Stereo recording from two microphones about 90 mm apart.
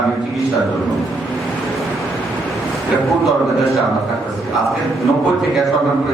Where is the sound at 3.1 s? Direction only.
Centre (ahead or behind).